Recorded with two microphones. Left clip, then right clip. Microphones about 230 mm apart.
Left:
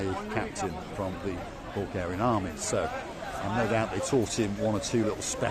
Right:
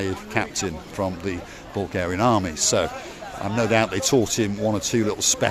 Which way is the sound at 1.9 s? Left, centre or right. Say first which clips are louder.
Right 8 dB; right.